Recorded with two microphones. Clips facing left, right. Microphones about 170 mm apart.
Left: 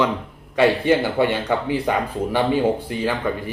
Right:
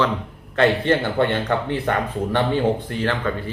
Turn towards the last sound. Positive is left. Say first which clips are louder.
# even
turn(degrees=10)  # may be behind; listen again after turning